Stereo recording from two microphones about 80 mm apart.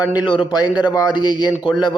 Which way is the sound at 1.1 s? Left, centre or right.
Left.